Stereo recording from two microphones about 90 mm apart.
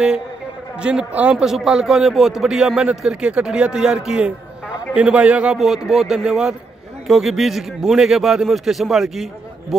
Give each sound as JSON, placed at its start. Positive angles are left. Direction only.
{"t": 0.7, "sound": "a man's voice", "side_deg": -10}